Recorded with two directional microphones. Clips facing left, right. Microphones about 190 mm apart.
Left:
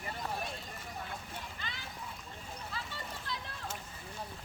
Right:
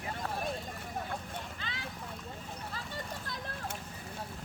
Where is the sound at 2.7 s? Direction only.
45° right (ahead or behind).